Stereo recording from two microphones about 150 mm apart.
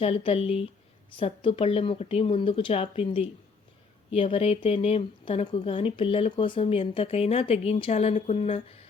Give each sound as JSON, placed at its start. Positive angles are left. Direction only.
{"t": 0.0, "sound": "speech", "side_deg": 40}